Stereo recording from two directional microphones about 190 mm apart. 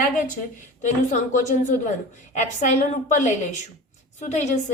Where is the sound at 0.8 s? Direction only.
40° left (ahead or behind).